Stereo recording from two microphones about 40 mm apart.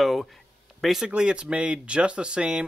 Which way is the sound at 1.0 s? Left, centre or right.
Right.